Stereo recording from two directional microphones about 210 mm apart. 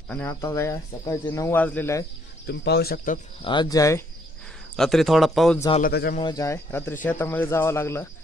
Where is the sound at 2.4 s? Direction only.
50° left (ahead or behind).